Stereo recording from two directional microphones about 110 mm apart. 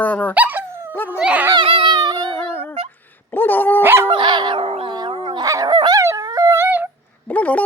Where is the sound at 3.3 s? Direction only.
20° left (ahead or behind).